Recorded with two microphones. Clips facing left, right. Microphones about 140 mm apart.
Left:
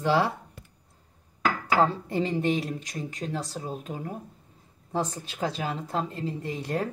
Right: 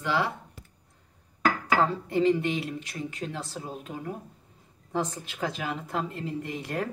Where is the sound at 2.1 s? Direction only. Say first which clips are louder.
Right 2 dB; 35° left (ahead or behind).